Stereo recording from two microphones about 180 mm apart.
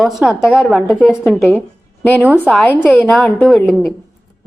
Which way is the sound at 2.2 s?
10° right (ahead or behind).